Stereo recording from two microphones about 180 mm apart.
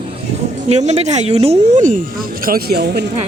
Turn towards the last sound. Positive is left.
turn(degrees=-60)  # may be behind; listen again after turning